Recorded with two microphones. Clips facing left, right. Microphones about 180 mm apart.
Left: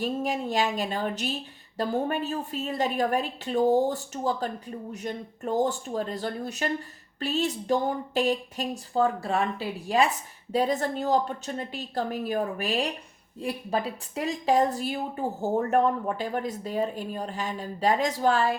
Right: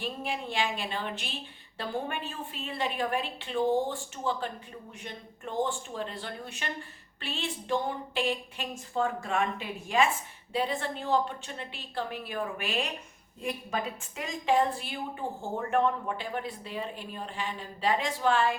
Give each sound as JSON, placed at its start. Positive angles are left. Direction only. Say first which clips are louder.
{"t": 0.0, "sound": "a woman's voice", "louder": "left 7 dB", "side_deg": 40}